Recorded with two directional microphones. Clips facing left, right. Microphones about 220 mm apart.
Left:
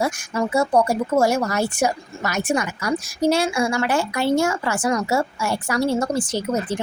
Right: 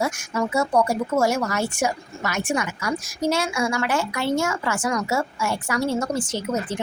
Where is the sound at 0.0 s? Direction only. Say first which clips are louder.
Left 2 dB; 30° left (ahead or behind).